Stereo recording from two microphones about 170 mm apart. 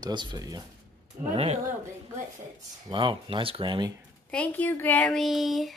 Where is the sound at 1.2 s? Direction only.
40° right (ahead or behind).